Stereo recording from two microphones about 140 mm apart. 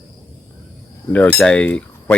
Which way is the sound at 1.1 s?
10° left (ahead or behind).